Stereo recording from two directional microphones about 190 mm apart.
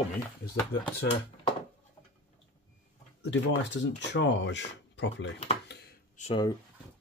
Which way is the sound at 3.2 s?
70° left (ahead or behind).